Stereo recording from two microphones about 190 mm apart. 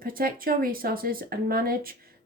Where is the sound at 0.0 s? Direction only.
50° right (ahead or behind).